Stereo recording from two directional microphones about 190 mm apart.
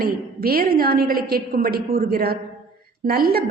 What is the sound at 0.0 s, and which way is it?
A woman's voice, 50° right (ahead or behind).